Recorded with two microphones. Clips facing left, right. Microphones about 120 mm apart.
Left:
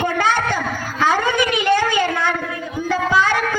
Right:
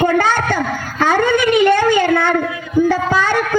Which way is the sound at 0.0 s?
45° right (ahead or behind).